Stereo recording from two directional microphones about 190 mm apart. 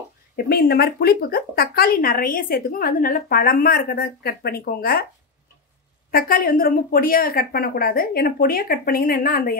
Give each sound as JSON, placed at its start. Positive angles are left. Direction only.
{"t": 0.5, "sound": "speech", "side_deg": 55}
{"t": 6.1, "sound": "speech", "side_deg": 50}